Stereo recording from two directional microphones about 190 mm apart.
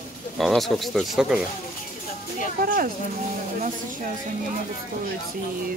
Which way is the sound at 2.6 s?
50° right (ahead or behind).